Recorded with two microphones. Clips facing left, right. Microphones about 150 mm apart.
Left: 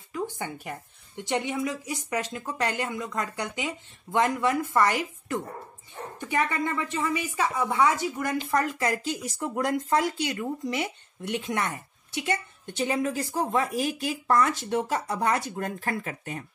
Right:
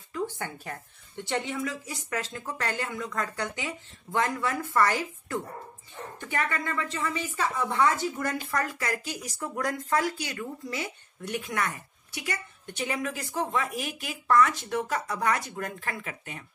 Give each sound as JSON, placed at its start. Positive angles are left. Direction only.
{"t": 0.1, "sound": "speech", "side_deg": 15}